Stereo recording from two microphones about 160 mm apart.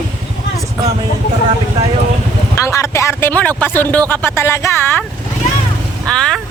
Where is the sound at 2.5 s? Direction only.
20° left (ahead or behind).